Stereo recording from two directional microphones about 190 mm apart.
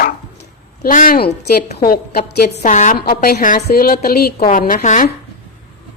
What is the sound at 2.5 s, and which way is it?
Speech, 40° left (ahead or behind).